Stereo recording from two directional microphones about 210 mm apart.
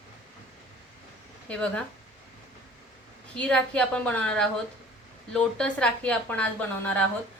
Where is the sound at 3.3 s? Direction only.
5° left (ahead or behind).